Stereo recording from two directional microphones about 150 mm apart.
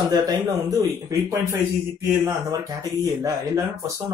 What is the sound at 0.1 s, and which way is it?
Speech, 25° right (ahead or behind).